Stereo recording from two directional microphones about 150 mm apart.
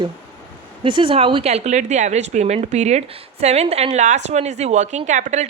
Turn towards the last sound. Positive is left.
turn(degrees=-50)  # may be behind; listen again after turning